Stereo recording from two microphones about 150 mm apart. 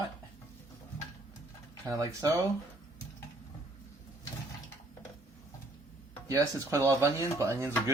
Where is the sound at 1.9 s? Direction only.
20° right (ahead or behind).